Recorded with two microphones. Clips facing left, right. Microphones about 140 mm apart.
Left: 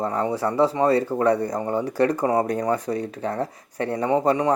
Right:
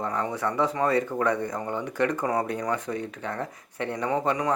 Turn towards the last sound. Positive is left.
turn(degrees=30)  # may be behind; listen again after turning